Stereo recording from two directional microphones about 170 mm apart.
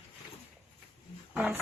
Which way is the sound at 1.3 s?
5° right (ahead or behind).